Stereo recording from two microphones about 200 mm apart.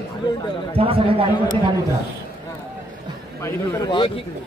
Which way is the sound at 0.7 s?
30° right (ahead or behind).